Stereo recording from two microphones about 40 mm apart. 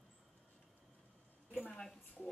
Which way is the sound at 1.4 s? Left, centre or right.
Left.